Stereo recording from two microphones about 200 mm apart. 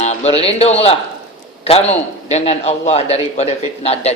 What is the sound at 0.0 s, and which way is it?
A man's voice, 35° left (ahead or behind).